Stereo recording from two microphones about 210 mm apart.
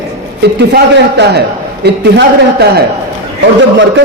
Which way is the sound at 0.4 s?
55° right (ahead or behind).